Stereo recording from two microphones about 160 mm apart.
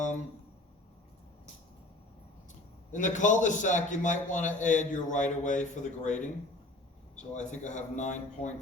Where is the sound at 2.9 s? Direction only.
50° left (ahead or behind).